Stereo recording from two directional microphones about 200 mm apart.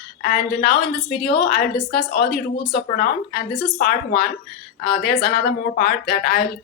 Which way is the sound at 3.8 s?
50° left (ahead or behind).